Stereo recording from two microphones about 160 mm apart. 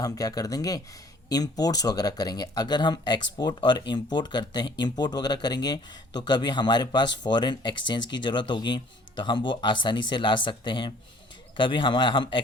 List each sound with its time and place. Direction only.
0.0 s a man's voice: 25° left (ahead or behind)